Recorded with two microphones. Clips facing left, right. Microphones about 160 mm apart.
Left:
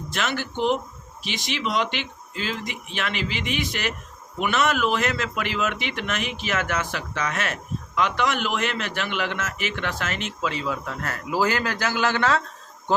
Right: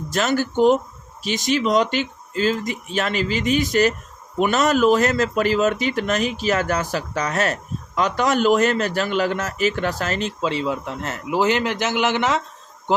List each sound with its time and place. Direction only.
0.1 s speech: 40° right (ahead or behind); by 12.4 s 20° right (ahead or behind)